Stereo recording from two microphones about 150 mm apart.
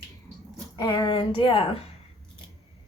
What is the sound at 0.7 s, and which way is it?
Speech, 25° left (ahead or behind).